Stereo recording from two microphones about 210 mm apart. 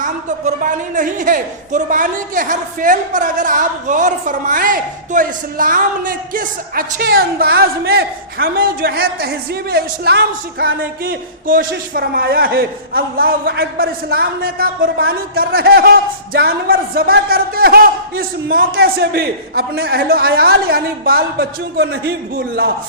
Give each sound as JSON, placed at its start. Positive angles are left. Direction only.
{"t": 0.0, "sound": "a woman's voice", "side_deg": -40}